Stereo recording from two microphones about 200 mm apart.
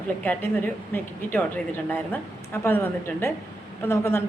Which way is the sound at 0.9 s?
10° left (ahead or behind).